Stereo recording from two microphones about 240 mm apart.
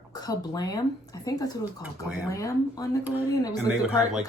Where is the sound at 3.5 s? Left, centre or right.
Centre.